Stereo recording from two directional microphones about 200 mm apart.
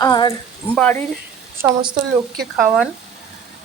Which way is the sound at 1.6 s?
15° right (ahead or behind).